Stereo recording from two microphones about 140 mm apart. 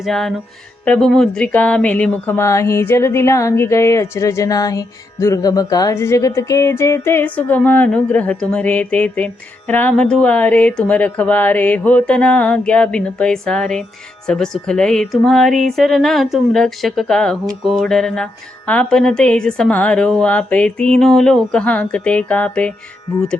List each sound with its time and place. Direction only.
0.0 s speech: centre (ahead or behind)